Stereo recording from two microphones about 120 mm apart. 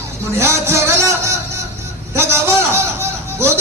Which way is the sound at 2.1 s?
20° right (ahead or behind).